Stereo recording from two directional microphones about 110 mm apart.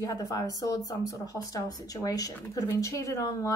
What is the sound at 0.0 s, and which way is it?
Speech, 35° left (ahead or behind).